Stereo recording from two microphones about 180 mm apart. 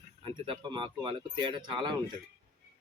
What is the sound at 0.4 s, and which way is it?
Speech, 25° right (ahead or behind).